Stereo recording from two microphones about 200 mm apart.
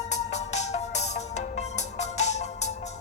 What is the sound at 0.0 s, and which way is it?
Music, 35° left (ahead or behind).